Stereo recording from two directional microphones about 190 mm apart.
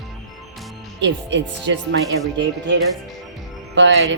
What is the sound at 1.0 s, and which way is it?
Speech, 70° right (ahead or behind).